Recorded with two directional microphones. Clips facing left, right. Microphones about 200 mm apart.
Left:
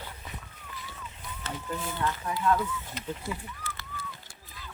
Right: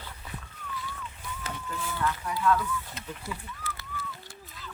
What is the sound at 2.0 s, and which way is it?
Speech, 25° left (ahead or behind).